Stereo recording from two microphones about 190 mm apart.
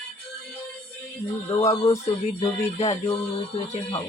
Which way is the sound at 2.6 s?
35° left (ahead or behind).